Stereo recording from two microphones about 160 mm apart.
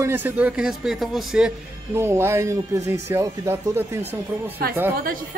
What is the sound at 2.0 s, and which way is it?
A man's voice, 15° right (ahead or behind).